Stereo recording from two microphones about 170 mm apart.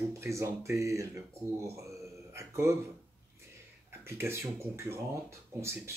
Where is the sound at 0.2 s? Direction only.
15° right (ahead or behind).